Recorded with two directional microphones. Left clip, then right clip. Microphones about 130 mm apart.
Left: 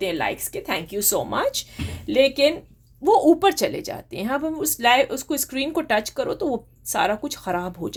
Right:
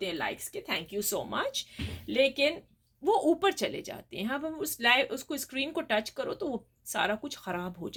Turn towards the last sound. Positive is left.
turn(degrees=35)  # may be behind; listen again after turning